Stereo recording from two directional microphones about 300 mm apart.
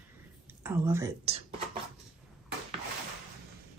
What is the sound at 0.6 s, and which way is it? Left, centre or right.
Speech, centre.